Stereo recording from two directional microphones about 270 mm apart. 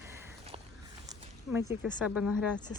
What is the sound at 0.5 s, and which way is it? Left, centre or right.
Walk, right.